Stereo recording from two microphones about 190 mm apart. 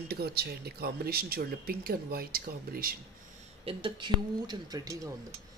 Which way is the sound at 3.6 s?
25° right (ahead or behind).